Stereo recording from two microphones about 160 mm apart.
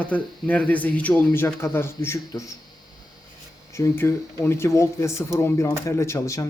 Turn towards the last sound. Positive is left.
turn(degrees=20)  # may be behind; listen again after turning